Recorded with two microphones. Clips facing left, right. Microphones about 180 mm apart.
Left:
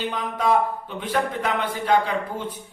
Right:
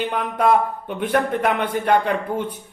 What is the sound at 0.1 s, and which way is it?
A man's voice, 60° right (ahead or behind).